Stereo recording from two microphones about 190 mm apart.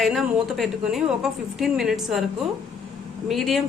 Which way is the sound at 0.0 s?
Centre (ahead or behind).